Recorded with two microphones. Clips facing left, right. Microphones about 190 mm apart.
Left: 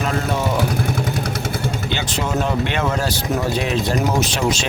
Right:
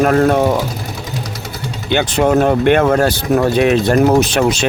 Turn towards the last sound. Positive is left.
turn(degrees=-60)  # may be behind; listen again after turning